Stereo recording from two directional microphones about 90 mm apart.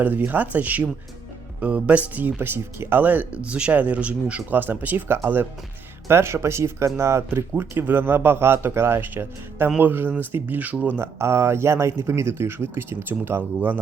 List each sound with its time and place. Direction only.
0.0 s speech: 20° right (ahead or behind)